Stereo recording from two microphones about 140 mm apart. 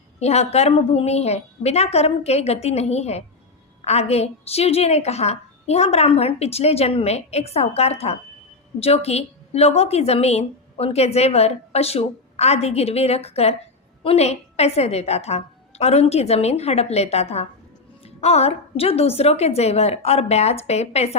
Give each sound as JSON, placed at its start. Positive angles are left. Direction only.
{"t": 0.2, "sound": "a woman's voice", "side_deg": 50}